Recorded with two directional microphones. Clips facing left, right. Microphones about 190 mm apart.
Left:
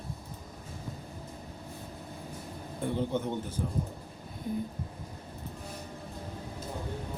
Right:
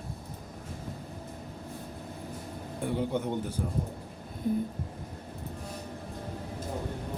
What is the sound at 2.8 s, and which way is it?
Speech, 15° right (ahead or behind).